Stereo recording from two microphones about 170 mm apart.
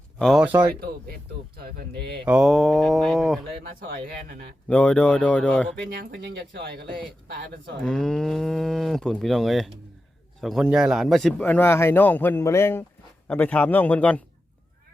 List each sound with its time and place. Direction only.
0.2 s moo: centre (ahead or behind)
0.4 s speech: 10° right (ahead or behind)
0.8 s speech: 60° right (ahead or behind)
2.2 s moo: 5° right (ahead or behind)
3.6 s speech: 60° right (ahead or behind)
4.7 s moo: 5° left (ahead or behind)
5.9 s speech: 60° right (ahead or behind); by 6.8 s 85° right
7.8 s moo: 5° left (ahead or behind)
10.4 s a man's voice: centre (ahead or behind)